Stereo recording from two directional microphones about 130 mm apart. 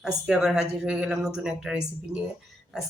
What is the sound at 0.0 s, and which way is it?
Speech, 5° right (ahead or behind).